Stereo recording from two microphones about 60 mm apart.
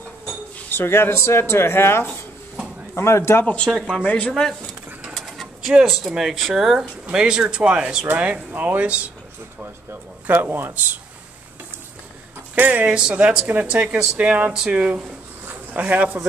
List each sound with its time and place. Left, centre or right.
0.7 s speech: left
2.0 s drawer open or close: centre
2.9 s speech: left
3.4 s speech: centre
5.2 s speech: centre
8.1 s speech: right
10.2 s speech: right
12.5 s speech: right
15.7 s speech: right